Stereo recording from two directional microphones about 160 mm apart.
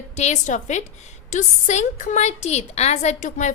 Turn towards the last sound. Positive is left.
turn(degrees=45)  # may be behind; listen again after turning